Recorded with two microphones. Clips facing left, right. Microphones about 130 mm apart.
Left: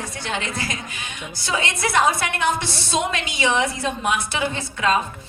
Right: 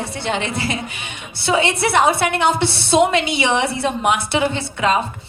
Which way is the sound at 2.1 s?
70° right (ahead or behind).